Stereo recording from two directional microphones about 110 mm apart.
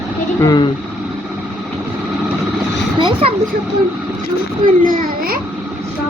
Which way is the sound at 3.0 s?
50° right (ahead or behind).